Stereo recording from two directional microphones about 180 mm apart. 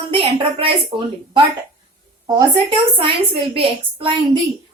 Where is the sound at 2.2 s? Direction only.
25° right (ahead or behind).